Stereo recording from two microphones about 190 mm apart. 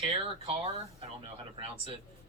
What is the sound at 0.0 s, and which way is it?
Speech, 25° right (ahead or behind).